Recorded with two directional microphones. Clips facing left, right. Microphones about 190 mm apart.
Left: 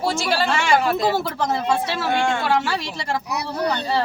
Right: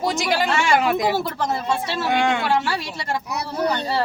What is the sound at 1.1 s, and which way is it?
Speech, centre (ahead or behind).